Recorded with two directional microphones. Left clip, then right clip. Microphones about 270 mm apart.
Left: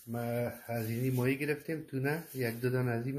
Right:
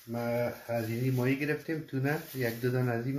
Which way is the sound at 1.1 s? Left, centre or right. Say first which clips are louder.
Right 2 dB; left.